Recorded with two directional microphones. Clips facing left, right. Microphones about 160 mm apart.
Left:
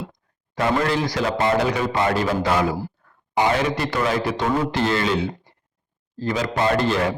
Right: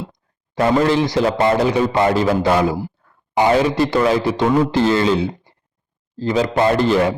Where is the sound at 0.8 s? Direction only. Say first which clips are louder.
Right 6 dB; 25° right (ahead or behind).